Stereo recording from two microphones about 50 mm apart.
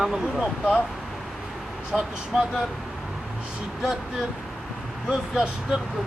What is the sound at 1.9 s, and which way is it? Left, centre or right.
Speech, centre.